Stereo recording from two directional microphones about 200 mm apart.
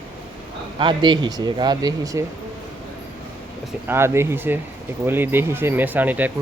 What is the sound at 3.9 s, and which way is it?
Speech, 10° right (ahead or behind).